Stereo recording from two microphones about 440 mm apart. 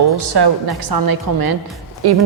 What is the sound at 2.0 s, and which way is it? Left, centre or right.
Speech, right.